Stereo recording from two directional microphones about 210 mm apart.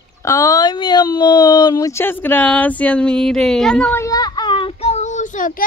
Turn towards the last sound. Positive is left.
turn(degrees=40)  # may be behind; listen again after turning